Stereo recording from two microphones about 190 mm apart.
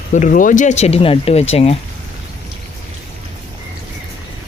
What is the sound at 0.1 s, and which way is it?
Speech, 40° left (ahead or behind).